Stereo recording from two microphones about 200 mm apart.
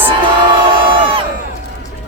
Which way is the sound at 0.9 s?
25° right (ahead or behind).